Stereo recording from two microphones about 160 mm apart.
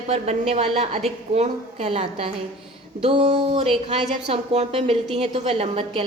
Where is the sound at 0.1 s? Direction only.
40° right (ahead or behind).